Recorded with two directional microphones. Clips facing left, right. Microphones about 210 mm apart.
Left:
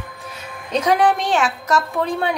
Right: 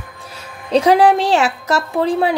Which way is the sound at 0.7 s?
30° right (ahead or behind).